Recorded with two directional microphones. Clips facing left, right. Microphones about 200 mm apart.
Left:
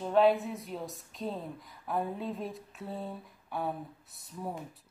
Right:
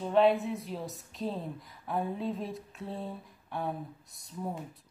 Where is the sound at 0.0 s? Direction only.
Centre (ahead or behind).